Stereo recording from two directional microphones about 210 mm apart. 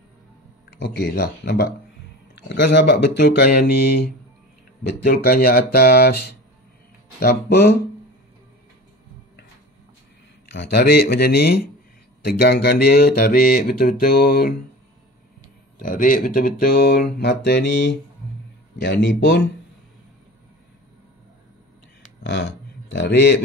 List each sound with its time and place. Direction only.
0.7 s speech: 50° left (ahead or behind)
10.5 s speech: 50° left (ahead or behind)
15.8 s speech: 40° left (ahead or behind); by 19.5 s 55° left (ahead or behind)
22.2 s speech: 55° left (ahead or behind)